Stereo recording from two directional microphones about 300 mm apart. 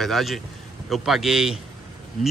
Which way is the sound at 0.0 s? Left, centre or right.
Centre.